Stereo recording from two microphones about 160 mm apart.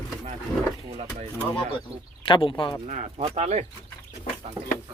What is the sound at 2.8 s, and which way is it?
Speech, 50° right (ahead or behind).